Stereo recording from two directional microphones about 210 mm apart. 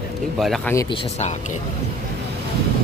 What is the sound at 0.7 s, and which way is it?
Speech, 20° left (ahead or behind).